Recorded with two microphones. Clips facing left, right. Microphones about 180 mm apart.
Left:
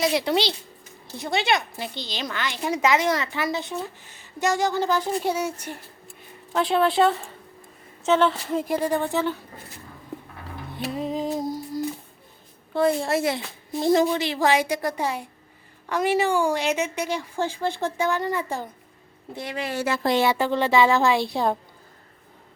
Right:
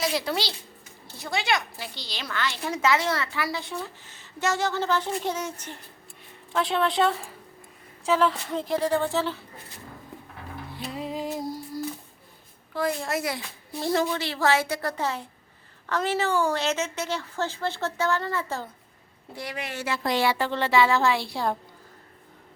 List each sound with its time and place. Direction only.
0.0 s a woman's voice: 20° left (ahead or behind); by 8.6 s 5° left (ahead or behind)
9.0 s speech: 15° left (ahead or behind)
11.1 s music: 20° left (ahead or behind)
12.7 s a woman's voice: 25° left (ahead or behind)
19.4 s speech: 25° left (ahead or behind)
20.1 s speech: 20° left (ahead or behind)